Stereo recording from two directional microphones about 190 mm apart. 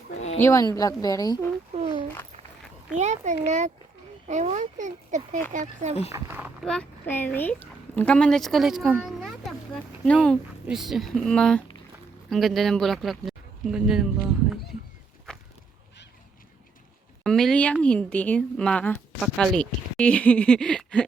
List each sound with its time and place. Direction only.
0.3 s speech: 15° left (ahead or behind)
2.9 s speech: 40° right (ahead or behind)
6.1 s speech: 10° right (ahead or behind)
6.7 s speech: 5° left (ahead or behind)
15.3 s walk: 5° left (ahead or behind)
17.2 s speech: 5° left (ahead or behind)